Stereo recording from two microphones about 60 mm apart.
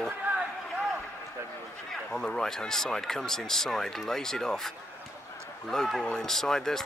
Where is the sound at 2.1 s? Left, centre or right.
Centre.